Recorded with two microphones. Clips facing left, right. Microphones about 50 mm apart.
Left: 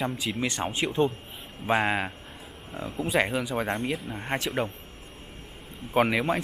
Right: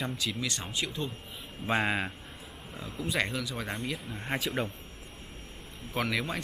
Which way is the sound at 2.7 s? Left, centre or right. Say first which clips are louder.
Left 6 dB; left.